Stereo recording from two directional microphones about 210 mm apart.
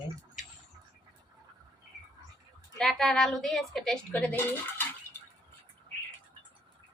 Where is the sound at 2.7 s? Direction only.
Centre (ahead or behind).